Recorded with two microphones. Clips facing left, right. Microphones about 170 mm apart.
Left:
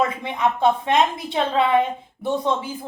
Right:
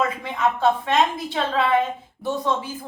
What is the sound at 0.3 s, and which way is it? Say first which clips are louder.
A woman's voice: left 1 dB; 15° left (ahead or behind).